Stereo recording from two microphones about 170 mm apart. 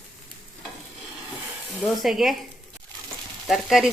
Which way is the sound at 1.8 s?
Centre (ahead or behind).